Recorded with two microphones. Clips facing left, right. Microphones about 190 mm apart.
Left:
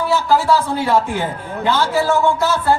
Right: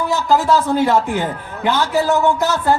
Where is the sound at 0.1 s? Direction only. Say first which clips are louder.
Even; 20° right (ahead or behind).